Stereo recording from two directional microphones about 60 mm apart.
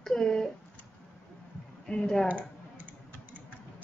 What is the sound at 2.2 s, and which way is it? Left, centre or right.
Typing, right.